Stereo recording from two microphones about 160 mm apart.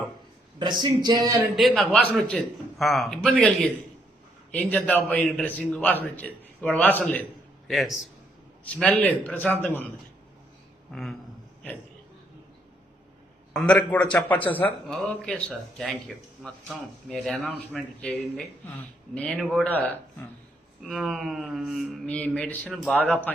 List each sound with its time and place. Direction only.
0.6 s speech: 30° right (ahead or behind)
1.5 s a man's voice: centre (ahead or behind)
7.7 s a man's voice: centre (ahead or behind)
10.9 s a man's voice: centre (ahead or behind)
13.5 s a man's voice: 5° left (ahead or behind)
20.8 s a man's voice: centre (ahead or behind)